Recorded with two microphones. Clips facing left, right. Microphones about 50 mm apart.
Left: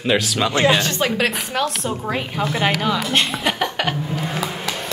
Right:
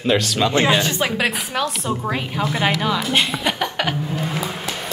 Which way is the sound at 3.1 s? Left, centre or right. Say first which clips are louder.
Even; centre.